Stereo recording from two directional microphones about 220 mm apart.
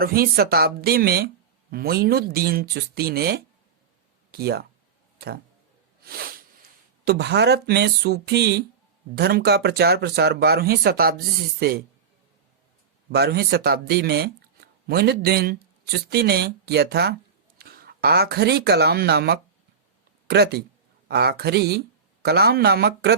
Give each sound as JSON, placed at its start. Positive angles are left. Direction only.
{"t": 0.0, "sound": "speech", "side_deg": -45}
{"t": 5.1, "sound": "a sound", "side_deg": -45}
{"t": 7.0, "sound": "speech", "side_deg": -50}
{"t": 13.1, "sound": "speech", "side_deg": -45}